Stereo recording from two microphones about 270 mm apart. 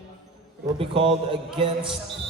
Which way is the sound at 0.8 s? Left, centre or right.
Centre.